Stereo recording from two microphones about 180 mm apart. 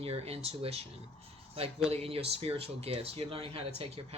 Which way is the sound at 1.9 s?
35° right (ahead or behind).